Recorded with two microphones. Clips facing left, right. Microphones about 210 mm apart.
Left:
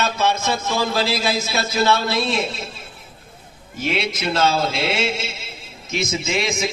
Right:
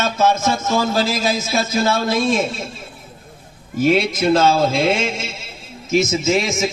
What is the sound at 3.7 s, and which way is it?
A man's voice, 45° right (ahead or behind).